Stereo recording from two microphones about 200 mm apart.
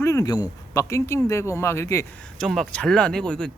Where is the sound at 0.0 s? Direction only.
15° left (ahead or behind).